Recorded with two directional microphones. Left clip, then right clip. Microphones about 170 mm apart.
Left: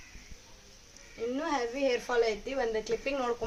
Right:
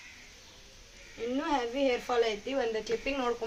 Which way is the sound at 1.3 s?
20° left (ahead or behind).